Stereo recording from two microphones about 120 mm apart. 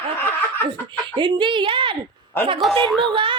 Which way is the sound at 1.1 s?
40° right (ahead or behind).